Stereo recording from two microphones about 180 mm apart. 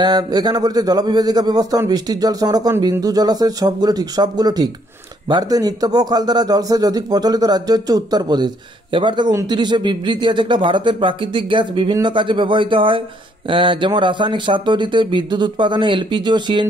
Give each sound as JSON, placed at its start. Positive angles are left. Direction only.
{"t": 0.0, "sound": "a man's voice", "side_deg": -25}